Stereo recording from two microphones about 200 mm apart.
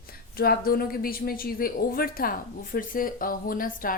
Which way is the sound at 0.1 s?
50° left (ahead or behind).